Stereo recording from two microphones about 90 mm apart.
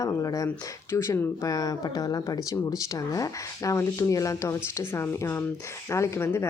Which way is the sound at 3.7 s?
35° left (ahead or behind).